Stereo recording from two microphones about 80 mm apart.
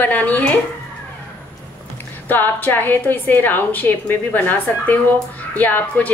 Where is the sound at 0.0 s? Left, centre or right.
Centre.